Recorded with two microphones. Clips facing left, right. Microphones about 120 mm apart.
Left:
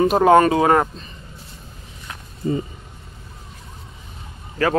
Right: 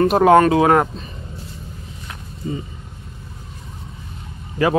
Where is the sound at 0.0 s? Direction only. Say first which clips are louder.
Right 1 dB; centre (ahead or behind).